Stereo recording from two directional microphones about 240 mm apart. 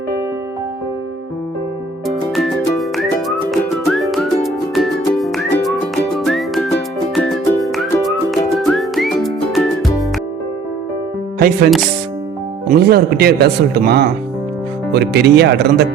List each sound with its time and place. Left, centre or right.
2.0 s music: centre
11.3 s speech: right